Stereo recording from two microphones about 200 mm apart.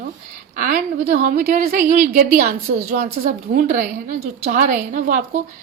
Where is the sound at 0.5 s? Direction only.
40° right (ahead or behind).